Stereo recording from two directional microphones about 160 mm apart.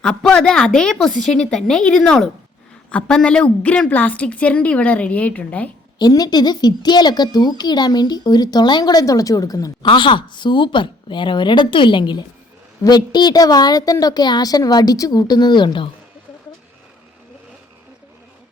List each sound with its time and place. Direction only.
0.0 s a woman's voice: 5° left (ahead or behind)
6.0 s a woman's voice: 25° left (ahead or behind)